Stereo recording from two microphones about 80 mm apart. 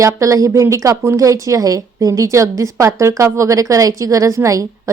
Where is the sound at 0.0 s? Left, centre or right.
Right.